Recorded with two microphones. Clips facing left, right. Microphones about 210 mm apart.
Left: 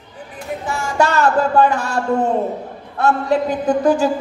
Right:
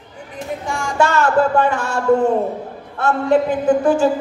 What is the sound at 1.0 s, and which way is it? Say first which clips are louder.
Speech: right 1 dB; 40° left (ahead or behind).